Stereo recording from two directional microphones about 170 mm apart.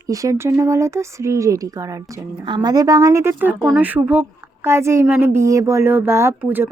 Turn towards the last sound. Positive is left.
turn(degrees=-10)  # may be behind; listen again after turning